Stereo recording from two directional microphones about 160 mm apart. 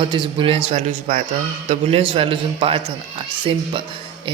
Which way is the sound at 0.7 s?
45° right (ahead or behind).